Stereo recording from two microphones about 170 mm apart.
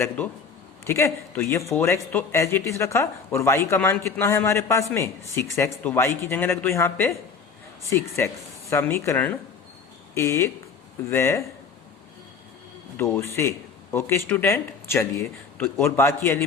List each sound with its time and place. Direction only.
0.9 s speech: 15° left (ahead or behind)
13.0 s speech: 15° left (ahead or behind)